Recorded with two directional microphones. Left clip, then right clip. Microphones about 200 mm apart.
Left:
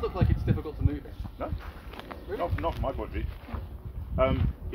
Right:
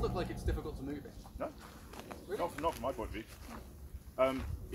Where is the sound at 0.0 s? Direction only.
Centre (ahead or behind).